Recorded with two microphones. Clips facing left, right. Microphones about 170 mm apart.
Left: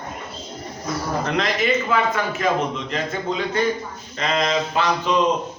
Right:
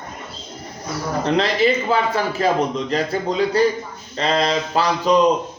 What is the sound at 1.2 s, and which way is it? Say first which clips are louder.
A man's voice: right 7 dB; 30° right (ahead or behind).